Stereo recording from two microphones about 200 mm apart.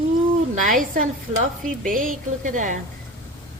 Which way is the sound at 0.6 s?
45° right (ahead or behind).